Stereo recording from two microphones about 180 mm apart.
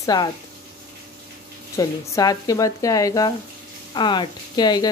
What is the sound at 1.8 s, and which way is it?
Speech, 20° left (ahead or behind).